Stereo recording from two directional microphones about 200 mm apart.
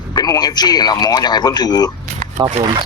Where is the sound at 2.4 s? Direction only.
25° right (ahead or behind).